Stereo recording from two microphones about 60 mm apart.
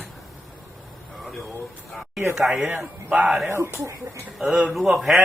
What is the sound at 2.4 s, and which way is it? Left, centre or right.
Speech, centre.